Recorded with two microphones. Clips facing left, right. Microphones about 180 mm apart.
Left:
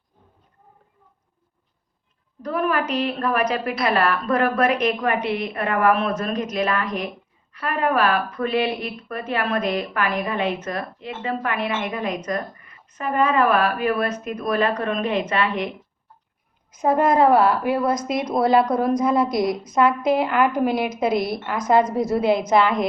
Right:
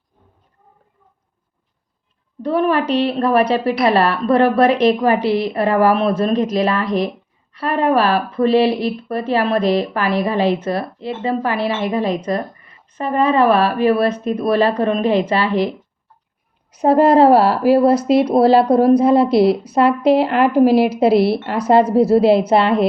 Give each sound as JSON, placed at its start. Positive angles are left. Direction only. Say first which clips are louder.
{"t": 2.4, "sound": "speech", "louder": "right 6 dB", "side_deg": -30}
{"t": 16.8, "sound": "speech", "louder": "right 6 dB", "side_deg": -30}